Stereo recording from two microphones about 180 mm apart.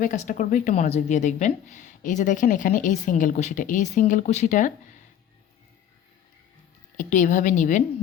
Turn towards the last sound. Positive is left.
turn(degrees=45)  # may be behind; listen again after turning